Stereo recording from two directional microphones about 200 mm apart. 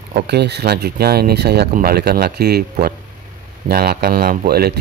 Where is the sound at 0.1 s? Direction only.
55° right (ahead or behind).